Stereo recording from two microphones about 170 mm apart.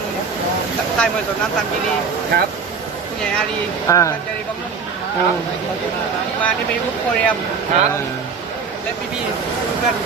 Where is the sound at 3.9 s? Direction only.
20° left (ahead or behind).